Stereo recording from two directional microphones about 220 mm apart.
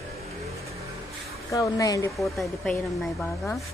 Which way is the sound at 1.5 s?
15° left (ahead or behind).